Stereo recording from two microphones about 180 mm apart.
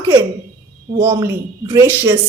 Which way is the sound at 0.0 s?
15° right (ahead or behind).